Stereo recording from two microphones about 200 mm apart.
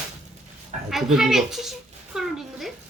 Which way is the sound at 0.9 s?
Centre (ahead or behind).